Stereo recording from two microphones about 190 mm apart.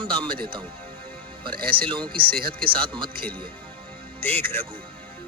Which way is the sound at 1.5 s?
50° right (ahead or behind).